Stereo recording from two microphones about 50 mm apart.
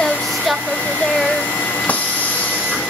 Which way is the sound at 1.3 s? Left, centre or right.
Left.